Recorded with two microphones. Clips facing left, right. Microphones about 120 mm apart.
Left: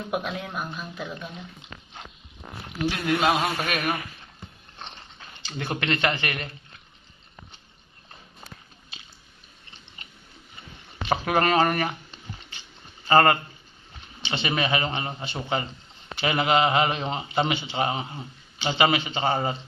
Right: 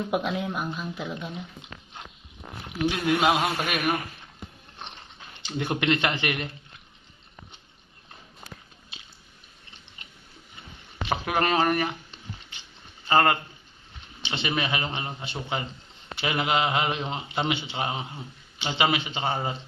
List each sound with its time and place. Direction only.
0.1 s speech: 15° right (ahead or behind)
2.7 s speech: 15° right (ahead or behind)
3.5 s speech: 5° right (ahead or behind)
5.8 s speech: 10° right (ahead or behind)
11.3 s a man's voice: centre (ahead or behind)
13.1 s a man's voice: 5° right (ahead or behind)